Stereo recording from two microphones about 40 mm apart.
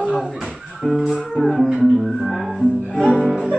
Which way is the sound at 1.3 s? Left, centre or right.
Centre.